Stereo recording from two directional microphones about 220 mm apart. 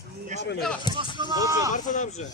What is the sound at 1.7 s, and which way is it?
Speech, 35° left (ahead or behind).